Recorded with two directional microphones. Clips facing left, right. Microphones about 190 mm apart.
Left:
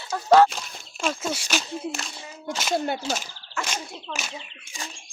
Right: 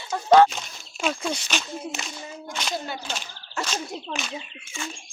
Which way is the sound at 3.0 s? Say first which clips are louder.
Left 5 dB; 40° left (ahead or behind).